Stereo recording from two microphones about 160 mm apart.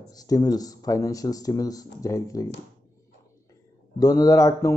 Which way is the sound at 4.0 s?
20° left (ahead or behind).